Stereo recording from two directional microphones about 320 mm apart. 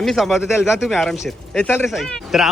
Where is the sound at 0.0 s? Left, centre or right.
Centre.